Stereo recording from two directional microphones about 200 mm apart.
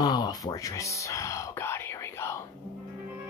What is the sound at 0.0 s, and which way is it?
Speech, 20° left (ahead or behind).